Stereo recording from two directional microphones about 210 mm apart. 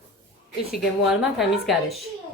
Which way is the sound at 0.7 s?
Centre (ahead or behind).